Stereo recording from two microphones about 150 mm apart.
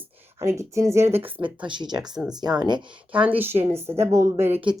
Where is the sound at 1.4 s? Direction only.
35° right (ahead or behind).